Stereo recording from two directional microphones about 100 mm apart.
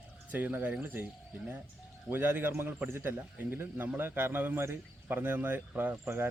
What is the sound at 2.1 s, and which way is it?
A man's voice, 20° right (ahead or behind).